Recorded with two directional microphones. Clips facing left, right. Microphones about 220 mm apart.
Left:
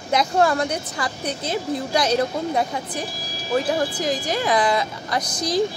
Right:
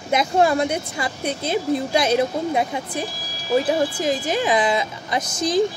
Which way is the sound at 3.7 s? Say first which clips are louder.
Right 2 dB; 25° right (ahead or behind).